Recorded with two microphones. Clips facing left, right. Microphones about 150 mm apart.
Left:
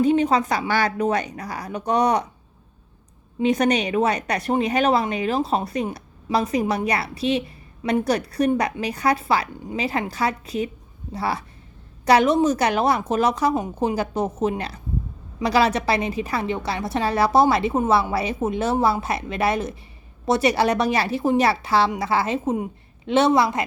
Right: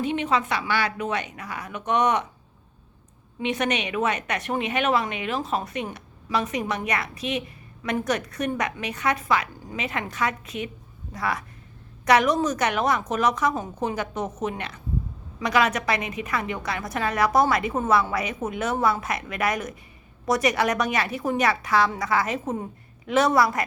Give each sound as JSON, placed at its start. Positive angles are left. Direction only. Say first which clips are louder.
{"t": 0.0, "sound": "a woman's voice", "louder": "left 6 dB", "side_deg": 40}
{"t": 3.4, "sound": "a woman's voice", "louder": "left 6 dB", "side_deg": 40}